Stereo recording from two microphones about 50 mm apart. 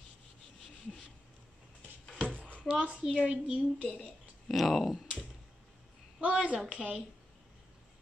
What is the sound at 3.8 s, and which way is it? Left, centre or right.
Speech, right.